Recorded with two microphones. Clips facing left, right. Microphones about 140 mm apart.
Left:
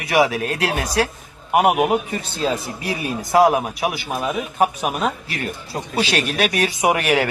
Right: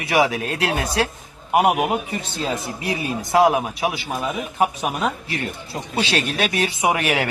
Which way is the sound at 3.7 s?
30° right (ahead or behind).